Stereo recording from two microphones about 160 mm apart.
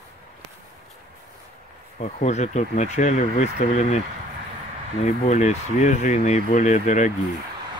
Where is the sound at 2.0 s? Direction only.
45° left (ahead or behind).